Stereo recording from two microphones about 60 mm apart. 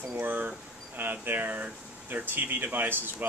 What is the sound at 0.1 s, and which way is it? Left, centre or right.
Speech, right.